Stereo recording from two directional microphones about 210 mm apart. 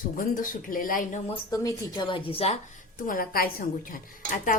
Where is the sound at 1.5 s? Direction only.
15° left (ahead or behind).